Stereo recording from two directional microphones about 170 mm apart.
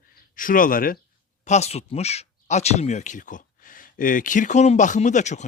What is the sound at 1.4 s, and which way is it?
Speech, 40° left (ahead or behind).